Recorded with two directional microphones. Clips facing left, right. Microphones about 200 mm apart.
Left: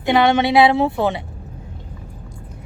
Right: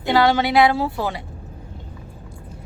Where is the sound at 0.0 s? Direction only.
20° left (ahead or behind).